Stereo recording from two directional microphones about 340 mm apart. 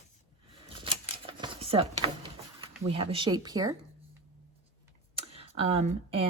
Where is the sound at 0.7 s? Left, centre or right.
Centre.